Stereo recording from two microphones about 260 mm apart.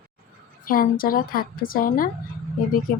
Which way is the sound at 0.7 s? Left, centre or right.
Left.